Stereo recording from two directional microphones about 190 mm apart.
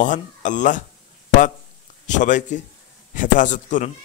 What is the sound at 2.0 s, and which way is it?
A man's voice, 40° left (ahead or behind).